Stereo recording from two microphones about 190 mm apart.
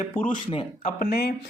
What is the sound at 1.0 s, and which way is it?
Speech, 60° left (ahead or behind).